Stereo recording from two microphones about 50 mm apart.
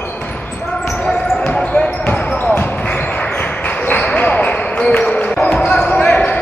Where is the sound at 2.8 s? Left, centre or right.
Left.